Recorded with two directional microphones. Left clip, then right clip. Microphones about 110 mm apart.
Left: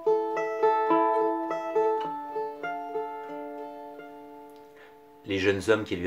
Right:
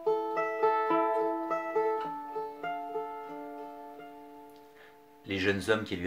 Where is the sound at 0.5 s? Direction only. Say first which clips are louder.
Left 5 dB; 20° left (ahead or behind).